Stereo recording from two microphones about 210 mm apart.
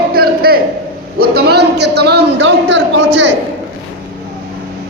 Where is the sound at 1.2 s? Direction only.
50° right (ahead or behind).